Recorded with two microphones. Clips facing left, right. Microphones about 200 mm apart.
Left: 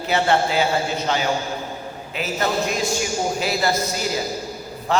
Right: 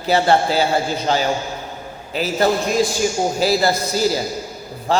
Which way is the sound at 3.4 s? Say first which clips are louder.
Right 6 dB; 35° right (ahead or behind).